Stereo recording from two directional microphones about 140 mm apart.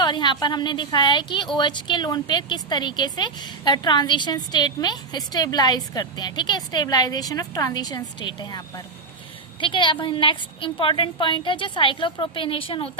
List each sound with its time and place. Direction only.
0.0 s a woman's voice: 30° left (ahead or behind)